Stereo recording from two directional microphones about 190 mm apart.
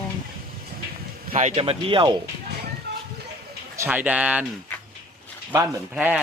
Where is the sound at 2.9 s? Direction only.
60° right (ahead or behind).